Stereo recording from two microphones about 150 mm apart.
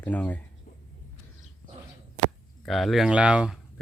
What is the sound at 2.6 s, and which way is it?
Speech, centre (ahead or behind).